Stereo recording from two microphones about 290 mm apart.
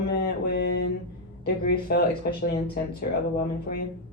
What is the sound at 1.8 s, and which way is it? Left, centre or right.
Speech, left.